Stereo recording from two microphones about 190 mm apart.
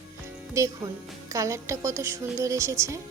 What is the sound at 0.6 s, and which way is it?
Speech, 15° right (ahead or behind).